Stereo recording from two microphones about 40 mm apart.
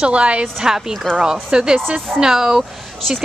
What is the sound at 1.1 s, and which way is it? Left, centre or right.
A woman's voice, centre.